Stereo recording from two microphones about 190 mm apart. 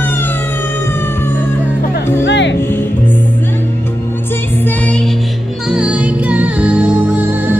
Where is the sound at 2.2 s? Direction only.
70° left (ahead or behind).